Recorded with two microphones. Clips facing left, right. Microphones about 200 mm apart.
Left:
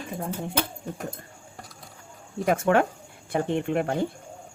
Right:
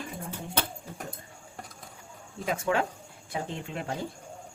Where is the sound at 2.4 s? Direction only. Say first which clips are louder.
Left 7 dB; 55° left (ahead or behind).